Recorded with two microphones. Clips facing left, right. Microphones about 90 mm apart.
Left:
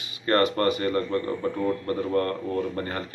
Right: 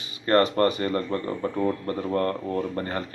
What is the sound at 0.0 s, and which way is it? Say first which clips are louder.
Speech: right 2 dB; 30° right (ahead or behind).